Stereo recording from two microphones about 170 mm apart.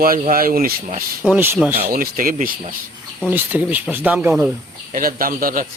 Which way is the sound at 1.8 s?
60° right (ahead or behind).